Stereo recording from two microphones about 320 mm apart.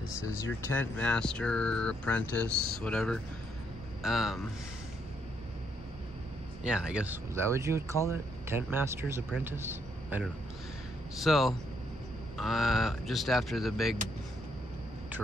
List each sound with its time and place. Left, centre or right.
0.7 s speech: centre
2.5 s speech: right
2.8 s speech: centre
6.6 s speech: centre